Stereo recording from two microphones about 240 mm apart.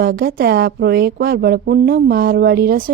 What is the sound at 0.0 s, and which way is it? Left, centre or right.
Speech, right.